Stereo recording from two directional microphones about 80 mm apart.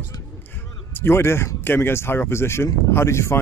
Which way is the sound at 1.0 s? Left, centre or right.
Left.